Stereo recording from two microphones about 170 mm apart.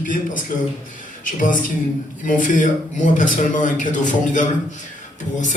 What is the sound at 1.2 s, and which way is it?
Speech, 50° left (ahead or behind).